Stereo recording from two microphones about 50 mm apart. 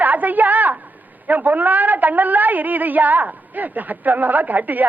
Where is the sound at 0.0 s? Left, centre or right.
Right.